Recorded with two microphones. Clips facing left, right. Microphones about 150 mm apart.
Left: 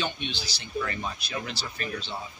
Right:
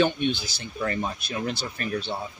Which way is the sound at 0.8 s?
40° right (ahead or behind).